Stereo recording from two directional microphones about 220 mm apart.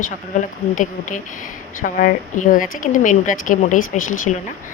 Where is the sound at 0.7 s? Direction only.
35° left (ahead or behind).